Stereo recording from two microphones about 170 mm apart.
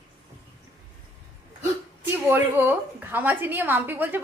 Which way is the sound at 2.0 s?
10° right (ahead or behind).